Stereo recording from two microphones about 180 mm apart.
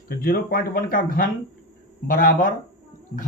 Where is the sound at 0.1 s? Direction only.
55° left (ahead or behind).